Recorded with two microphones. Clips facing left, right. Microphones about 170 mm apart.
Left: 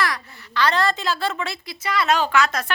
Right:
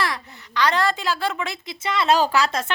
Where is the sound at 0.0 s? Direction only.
20° right (ahead or behind).